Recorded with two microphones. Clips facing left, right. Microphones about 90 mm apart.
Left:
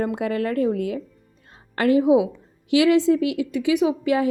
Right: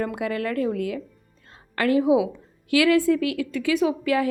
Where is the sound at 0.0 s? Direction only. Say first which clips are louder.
Left 3 dB; 25° left (ahead or behind).